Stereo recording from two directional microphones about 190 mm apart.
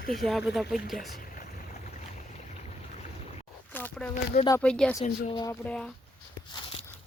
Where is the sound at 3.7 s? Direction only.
10° left (ahead or behind).